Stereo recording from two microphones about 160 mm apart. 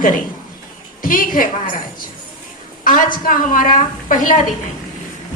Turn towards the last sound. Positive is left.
turn(degrees=55)  # may be behind; listen again after turning